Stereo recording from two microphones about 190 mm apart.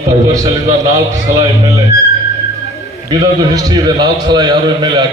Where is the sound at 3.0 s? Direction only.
20° right (ahead or behind).